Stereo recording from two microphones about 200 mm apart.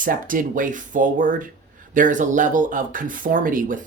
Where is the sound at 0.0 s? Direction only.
45° right (ahead or behind).